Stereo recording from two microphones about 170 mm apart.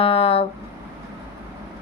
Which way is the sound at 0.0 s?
35° left (ahead or behind).